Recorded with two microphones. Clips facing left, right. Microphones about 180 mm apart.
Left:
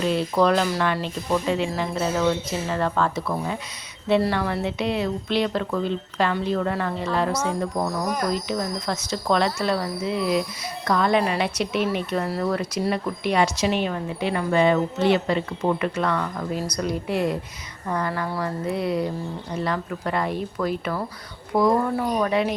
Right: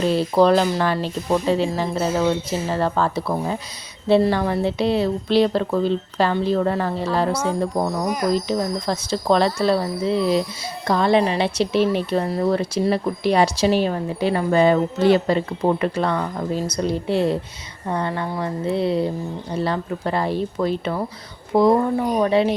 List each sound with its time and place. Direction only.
0.0 s speech: 35° right (ahead or behind)
8.0 s speech: 10° right (ahead or behind)
8.3 s speech: 30° right (ahead or behind)